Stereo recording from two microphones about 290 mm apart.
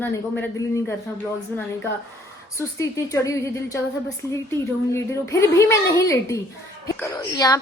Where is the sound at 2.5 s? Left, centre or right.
Centre.